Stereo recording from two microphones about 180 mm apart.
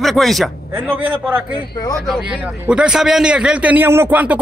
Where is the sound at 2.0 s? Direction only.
5° right (ahead or behind).